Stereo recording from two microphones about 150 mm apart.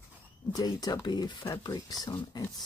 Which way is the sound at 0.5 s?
25° left (ahead or behind).